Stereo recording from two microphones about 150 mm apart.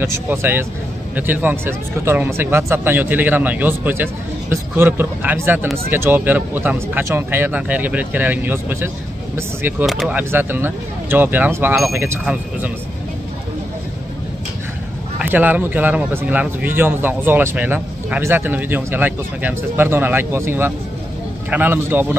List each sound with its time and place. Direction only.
0.0 s speech: 15° right (ahead or behind)
9.8 s speech: centre (ahead or behind)
10.1 s speech: 15° right (ahead or behind)
15.1 s speech: 10° right (ahead or behind)